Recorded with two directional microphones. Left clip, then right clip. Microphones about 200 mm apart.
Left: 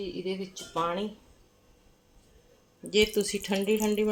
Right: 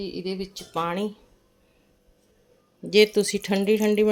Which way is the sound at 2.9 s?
40° right (ahead or behind).